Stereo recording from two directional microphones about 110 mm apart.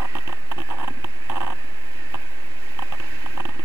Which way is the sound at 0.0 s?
30° right (ahead or behind).